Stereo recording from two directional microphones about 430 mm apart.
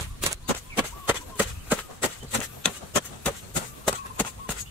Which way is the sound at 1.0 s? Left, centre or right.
Centre.